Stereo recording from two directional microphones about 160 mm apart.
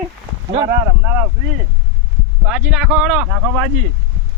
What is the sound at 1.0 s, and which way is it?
Speech, 10° right (ahead or behind).